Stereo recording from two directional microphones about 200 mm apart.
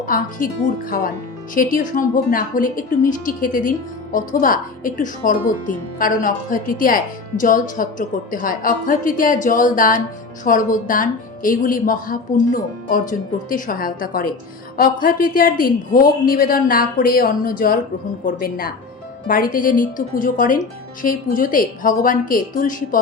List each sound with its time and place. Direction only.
0.0 s a woman's voice: 45° left (ahead or behind)